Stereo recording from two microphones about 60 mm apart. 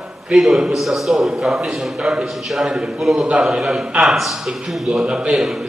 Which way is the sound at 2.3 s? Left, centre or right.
Centre.